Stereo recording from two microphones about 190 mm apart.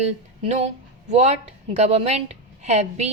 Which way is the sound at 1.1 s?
35° right (ahead or behind).